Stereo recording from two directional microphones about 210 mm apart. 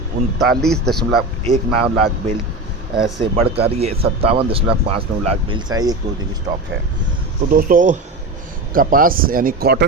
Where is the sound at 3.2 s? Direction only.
30° right (ahead or behind).